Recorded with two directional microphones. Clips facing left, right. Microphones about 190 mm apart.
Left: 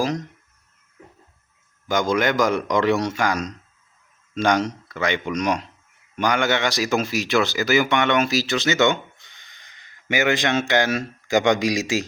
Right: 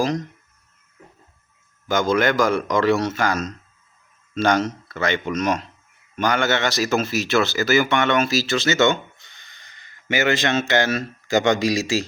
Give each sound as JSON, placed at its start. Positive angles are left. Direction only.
{"t": 0.0, "sound": "speech", "side_deg": 10}
{"t": 1.9, "sound": "speech", "side_deg": 15}